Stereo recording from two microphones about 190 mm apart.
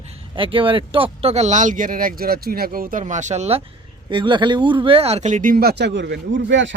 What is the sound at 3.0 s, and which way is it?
Speech, 40° right (ahead or behind).